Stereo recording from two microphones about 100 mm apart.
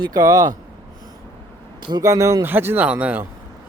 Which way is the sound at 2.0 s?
30° right (ahead or behind).